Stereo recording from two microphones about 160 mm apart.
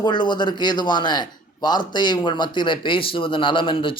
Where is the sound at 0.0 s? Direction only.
30° left (ahead or behind).